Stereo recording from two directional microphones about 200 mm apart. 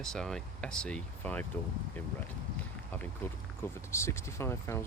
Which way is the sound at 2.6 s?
10° left (ahead or behind).